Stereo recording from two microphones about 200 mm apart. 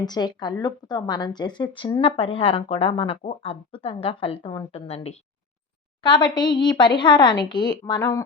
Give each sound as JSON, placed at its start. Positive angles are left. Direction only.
{"t": 0.0, "sound": "speech", "side_deg": 20}